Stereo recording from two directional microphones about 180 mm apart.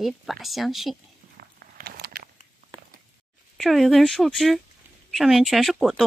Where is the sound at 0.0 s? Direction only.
Centre (ahead or behind).